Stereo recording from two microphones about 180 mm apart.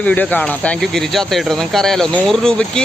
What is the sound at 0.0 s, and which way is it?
Speech, 5° left (ahead or behind).